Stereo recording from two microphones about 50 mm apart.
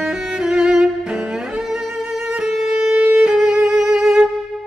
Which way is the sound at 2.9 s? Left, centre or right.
Right.